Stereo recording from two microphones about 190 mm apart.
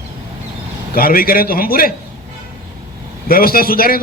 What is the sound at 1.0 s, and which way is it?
Speech, 50° left (ahead or behind).